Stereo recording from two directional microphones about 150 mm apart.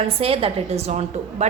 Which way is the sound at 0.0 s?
40° right (ahead or behind).